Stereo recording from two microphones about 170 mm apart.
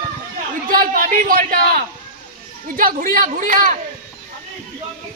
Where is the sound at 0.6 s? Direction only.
55° right (ahead or behind).